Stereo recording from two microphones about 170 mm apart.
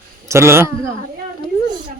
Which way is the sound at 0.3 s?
15° right (ahead or behind).